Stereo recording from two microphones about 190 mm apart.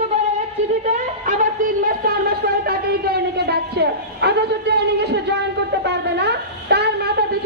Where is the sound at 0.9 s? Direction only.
40° right (ahead or behind).